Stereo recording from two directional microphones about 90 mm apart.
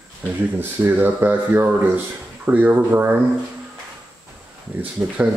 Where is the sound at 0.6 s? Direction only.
20° right (ahead or behind).